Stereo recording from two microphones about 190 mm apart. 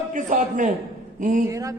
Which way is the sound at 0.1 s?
45° right (ahead or behind).